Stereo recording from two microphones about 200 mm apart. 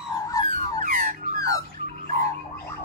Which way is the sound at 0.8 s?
45° right (ahead or behind).